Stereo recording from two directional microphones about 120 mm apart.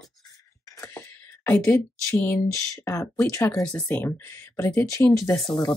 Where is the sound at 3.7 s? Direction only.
10° left (ahead or behind); by 5.3 s 30° left (ahead or behind).